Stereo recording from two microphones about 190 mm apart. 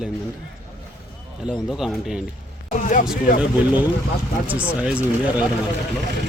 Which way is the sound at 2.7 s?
40° left (ahead or behind).